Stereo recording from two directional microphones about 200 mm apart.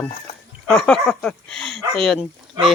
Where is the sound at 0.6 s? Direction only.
5° left (ahead or behind).